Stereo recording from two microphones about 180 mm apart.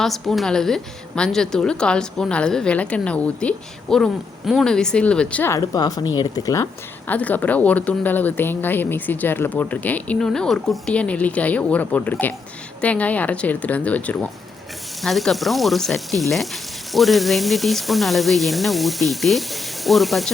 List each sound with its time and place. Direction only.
0.0 s a woman's voice: centre (ahead or behind); by 6.7 s 20° left (ahead or behind)
7.1 s a woman's voice: 10° left (ahead or behind)